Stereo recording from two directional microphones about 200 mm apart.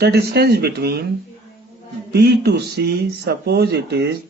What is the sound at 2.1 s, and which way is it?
Speech, 55° right (ahead or behind).